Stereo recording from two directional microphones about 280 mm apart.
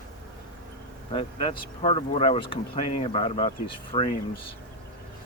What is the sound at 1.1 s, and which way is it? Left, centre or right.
Speech, centre.